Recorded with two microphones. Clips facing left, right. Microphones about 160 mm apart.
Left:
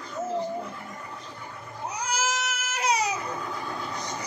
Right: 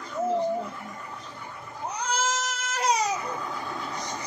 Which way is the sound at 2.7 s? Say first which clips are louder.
Right 1 dB; 40° right (ahead or behind).